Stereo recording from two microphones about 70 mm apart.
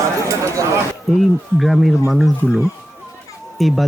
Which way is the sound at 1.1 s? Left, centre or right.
Centre.